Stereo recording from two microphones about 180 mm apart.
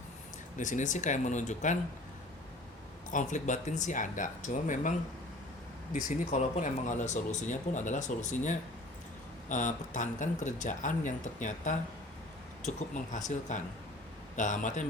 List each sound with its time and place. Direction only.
0.5 s speech: 45° left (ahead or behind)
3.1 s speech: 45° left (ahead or behind)